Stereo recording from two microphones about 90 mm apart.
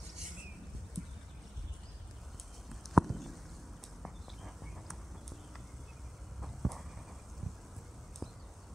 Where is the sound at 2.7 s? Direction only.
Centre (ahead or behind).